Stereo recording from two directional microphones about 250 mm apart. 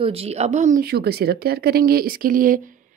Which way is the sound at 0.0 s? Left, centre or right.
Right.